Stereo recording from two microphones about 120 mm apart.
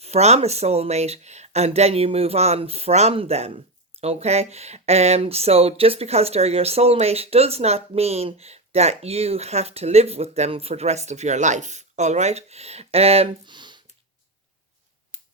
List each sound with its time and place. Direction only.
0.0 s speech: 65° right (ahead or behind)
13.4 s a sound: 40° right (ahead or behind)
15.1 s finger snapping: 70° right (ahead or behind)